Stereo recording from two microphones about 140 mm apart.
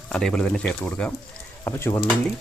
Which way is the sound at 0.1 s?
5° left (ahead or behind).